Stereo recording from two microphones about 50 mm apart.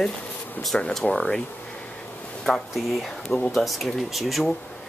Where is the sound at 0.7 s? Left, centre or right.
Centre.